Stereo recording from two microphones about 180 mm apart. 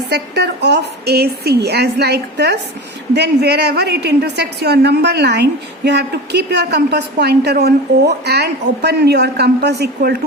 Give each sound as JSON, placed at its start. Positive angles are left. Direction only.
{"t": 0.1, "sound": "a woman's voice", "side_deg": -65}